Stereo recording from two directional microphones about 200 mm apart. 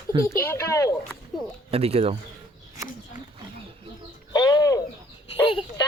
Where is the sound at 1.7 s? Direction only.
30° right (ahead or behind).